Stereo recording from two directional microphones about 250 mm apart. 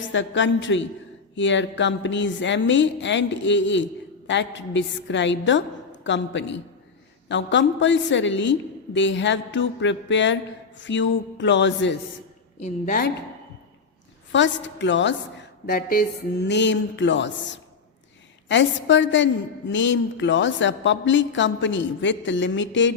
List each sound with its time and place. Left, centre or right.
0.1 s a woman's voice: left
12.5 s a woman's voice: left
14.3 s a woman's voice: left
15.6 s a woman's voice: left